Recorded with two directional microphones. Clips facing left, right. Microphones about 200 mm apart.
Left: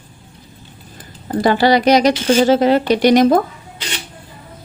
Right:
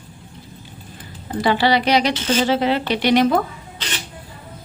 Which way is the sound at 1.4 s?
45° left (ahead or behind).